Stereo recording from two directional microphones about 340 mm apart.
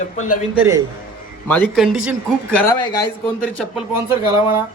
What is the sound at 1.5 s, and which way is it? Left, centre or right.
Speech, centre.